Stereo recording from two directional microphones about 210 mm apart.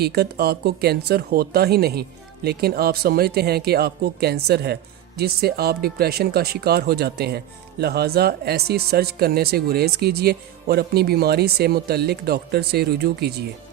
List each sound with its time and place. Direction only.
0.0 s speech: 50° right (ahead or behind)